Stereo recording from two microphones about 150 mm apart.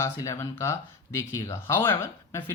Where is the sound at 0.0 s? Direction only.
20° left (ahead or behind).